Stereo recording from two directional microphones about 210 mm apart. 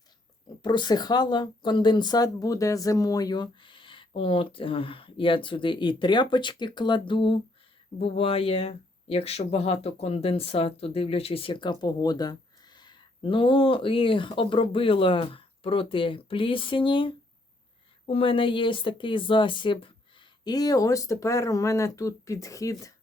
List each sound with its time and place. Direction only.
0.6 s speech: 20° left (ahead or behind)